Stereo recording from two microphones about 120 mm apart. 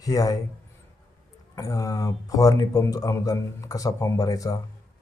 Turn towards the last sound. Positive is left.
turn(degrees=30)  # may be behind; listen again after turning